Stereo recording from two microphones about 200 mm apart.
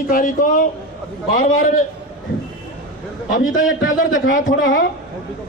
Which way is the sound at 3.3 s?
80° left.